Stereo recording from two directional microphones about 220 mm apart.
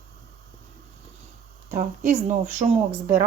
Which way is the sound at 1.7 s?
35° right (ahead or behind).